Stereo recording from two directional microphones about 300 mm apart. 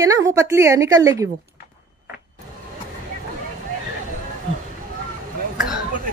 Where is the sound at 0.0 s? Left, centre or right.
Centre.